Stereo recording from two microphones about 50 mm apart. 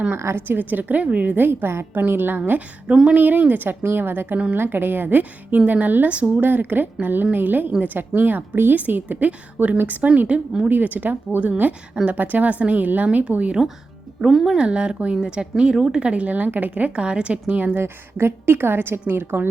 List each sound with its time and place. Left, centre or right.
0.2 s a woman's voice: right
0.4 s a woman's voice: right
1.9 s a woman's voice: right
2.8 s speech: centre
3.2 s a woman's voice: right
10.7 s a woman's voice: right
14.2 s a woman's voice: centre; by 17.6 s right
17.7 s a woman's voice: right